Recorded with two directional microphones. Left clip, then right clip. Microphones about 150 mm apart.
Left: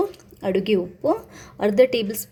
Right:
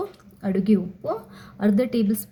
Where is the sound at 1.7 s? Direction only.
25° left (ahead or behind).